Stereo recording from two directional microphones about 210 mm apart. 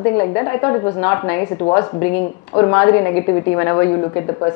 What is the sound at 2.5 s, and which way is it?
A woman's voice, 20° left (ahead or behind).